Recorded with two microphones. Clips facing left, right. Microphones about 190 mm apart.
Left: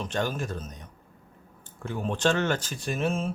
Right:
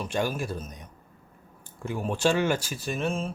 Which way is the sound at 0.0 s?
10° right (ahead or behind).